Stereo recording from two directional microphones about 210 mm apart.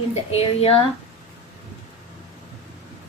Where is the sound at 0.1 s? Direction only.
30° left (ahead or behind).